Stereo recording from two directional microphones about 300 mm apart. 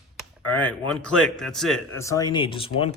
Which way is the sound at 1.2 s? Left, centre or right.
Centre.